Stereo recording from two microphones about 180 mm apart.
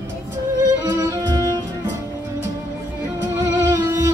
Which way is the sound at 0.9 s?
20° right (ahead or behind).